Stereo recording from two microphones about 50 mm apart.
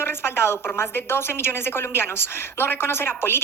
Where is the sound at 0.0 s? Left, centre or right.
Left.